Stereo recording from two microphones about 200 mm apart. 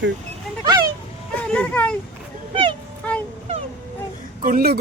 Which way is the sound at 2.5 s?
25° right (ahead or behind).